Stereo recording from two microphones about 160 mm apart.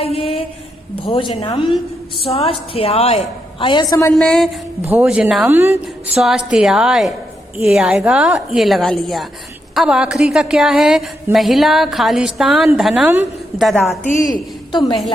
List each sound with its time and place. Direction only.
0.0 s a sound: 35° left (ahead or behind)
0.9 s a woman's voice: 35° left (ahead or behind)
4.1 s a woman's voice: 5° left (ahead or behind)
4.9 s a woman's voice: 10° right (ahead or behind)
6.1 s a woman's voice: 5° right (ahead or behind)
14.2 s a woman's voice: 25° left (ahead or behind)